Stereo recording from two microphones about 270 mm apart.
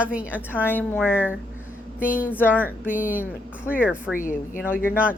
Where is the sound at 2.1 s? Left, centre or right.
Left.